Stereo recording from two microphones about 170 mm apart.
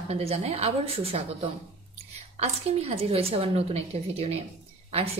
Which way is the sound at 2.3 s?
40° right (ahead or behind).